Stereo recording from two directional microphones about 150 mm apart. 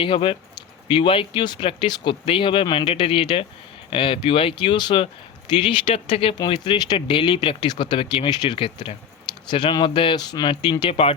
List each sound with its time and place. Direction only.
0.0 s speech: 35° left (ahead or behind)